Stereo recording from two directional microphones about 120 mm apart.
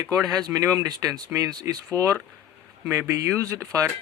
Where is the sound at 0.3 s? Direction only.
30° right (ahead or behind).